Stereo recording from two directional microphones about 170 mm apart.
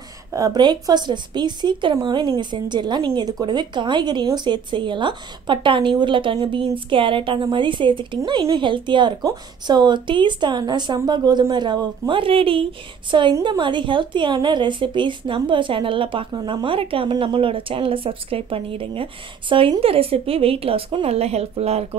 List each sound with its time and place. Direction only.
0.3 s a woman's voice: 20° right (ahead or behind); by 21.8 s 40° right (ahead or behind)